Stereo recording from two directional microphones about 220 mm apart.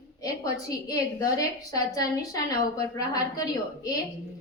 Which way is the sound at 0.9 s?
15° left (ahead or behind).